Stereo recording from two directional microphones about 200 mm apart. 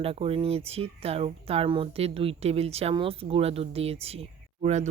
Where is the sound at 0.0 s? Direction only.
30° right (ahead or behind).